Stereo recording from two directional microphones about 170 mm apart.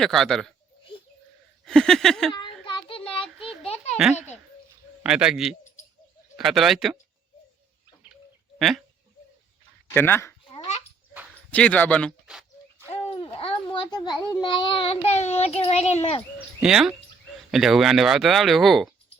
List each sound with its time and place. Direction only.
0.0 s speech: centre (ahead or behind)
1.6 s speech: 5° left (ahead or behind)
2.3 s child singing: 30° left (ahead or behind)
3.3 s a sound: centre (ahead or behind)
3.6 s a sound: 35° left (ahead or behind)
3.9 s speech: 5° right (ahead or behind)
8.5 s speech: centre (ahead or behind)
9.9 s speech: 15° left (ahead or behind)
11.5 s speech: 10° left (ahead or behind)
12.2 s bird: 5° right (ahead or behind)
12.9 s a child's voice: 35° left (ahead or behind)
16.6 s speech: 5° right (ahead or behind)